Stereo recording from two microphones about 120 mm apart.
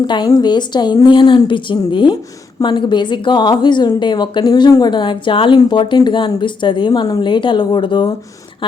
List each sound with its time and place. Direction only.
0.3 s a woman's voice: 35° left (ahead or behind)